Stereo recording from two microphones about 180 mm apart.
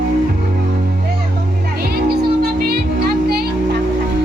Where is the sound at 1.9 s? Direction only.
60° right (ahead or behind).